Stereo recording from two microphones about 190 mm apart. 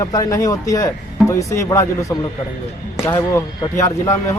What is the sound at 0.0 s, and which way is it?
Speech, 20° left (ahead or behind).